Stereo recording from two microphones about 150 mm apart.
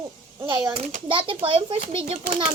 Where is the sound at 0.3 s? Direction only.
30° right (ahead or behind).